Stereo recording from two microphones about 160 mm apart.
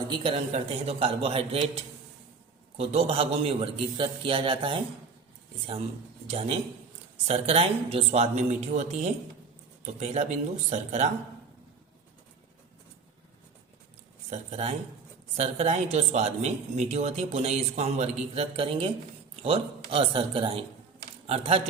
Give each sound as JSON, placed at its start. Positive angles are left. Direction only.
{"t": 0.0, "sound": "a man's voice", "side_deg": -35}
{"t": 6.2, "sound": "a man's voice", "side_deg": -40}
{"t": 14.3, "sound": "a man's voice", "side_deg": -45}